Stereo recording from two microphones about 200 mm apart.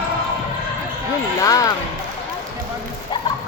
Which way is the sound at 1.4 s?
15° left (ahead or behind).